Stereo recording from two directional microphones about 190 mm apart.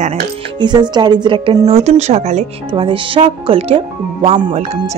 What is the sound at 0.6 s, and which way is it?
Speech, 25° right (ahead or behind).